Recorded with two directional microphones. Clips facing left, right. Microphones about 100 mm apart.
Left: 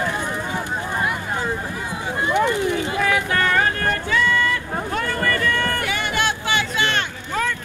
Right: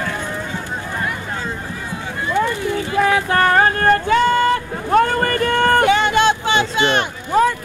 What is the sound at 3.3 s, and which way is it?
Boat, 40° right (ahead or behind).